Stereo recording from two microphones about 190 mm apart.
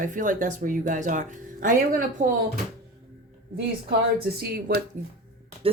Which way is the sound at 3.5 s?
55° right (ahead or behind).